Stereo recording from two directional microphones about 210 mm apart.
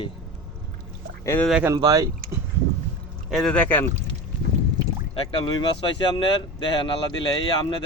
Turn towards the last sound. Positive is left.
turn(degrees=20)  # may be behind; listen again after turning